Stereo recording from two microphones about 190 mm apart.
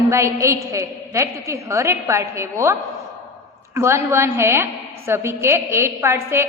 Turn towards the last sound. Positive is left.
turn(degrees=-15)  # may be behind; listen again after turning